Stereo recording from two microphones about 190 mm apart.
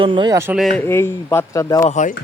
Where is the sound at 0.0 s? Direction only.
25° right (ahead or behind).